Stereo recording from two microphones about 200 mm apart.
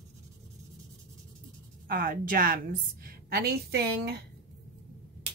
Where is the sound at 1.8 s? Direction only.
45° right (ahead or behind).